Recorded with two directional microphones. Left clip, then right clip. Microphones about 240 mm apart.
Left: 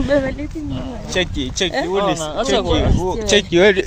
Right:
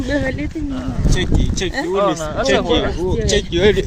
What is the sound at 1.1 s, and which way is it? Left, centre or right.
Speech, left.